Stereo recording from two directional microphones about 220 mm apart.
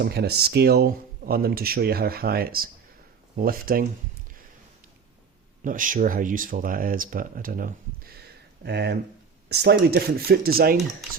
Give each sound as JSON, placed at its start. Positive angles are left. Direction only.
{"t": 0.0, "sound": "speech", "side_deg": -50}
{"t": 5.6, "sound": "speech", "side_deg": -40}
{"t": 8.6, "sound": "speech", "side_deg": -50}